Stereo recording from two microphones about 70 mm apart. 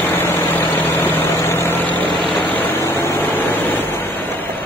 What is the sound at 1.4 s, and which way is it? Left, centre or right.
Vehicle, left.